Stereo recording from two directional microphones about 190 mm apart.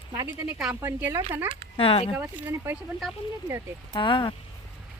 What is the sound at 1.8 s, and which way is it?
Speech, 30° left (ahead or behind).